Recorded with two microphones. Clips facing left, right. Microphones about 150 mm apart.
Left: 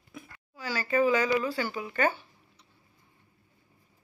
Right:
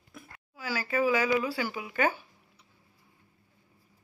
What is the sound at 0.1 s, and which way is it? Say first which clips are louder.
Speech: left 3 dB; 10° right (ahead or behind).